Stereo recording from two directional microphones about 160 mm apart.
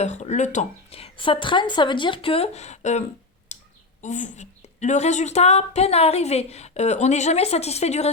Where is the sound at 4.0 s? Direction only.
50° left (ahead or behind).